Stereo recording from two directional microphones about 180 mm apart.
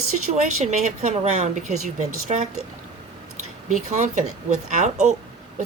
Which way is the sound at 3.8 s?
40° right (ahead or behind).